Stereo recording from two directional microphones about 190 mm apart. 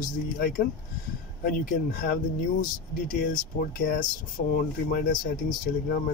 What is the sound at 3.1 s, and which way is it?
Speech, 50° left (ahead or behind).